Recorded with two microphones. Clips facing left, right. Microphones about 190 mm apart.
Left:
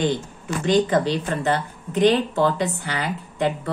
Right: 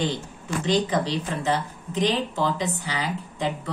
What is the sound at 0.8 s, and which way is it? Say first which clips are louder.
Speech: left 4 dB; 55° left (ahead or behind).